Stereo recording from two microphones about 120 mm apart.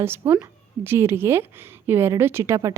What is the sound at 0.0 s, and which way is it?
A woman's voice, 20° right (ahead or behind).